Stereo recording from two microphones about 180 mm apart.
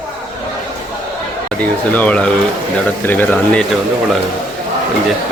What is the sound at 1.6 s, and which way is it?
Speech, 10° left (ahead or behind).